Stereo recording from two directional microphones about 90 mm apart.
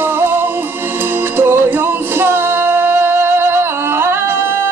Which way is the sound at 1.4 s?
25° right (ahead or behind).